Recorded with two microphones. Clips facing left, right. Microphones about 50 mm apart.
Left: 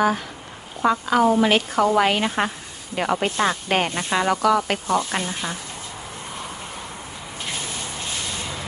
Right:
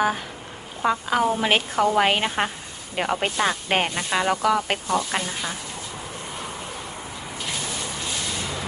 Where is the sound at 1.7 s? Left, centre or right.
Left.